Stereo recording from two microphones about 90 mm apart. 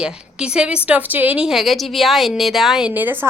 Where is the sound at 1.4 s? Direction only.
Centre (ahead or behind).